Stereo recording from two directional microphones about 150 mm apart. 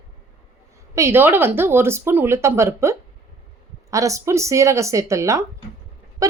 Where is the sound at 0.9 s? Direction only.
15° right (ahead or behind).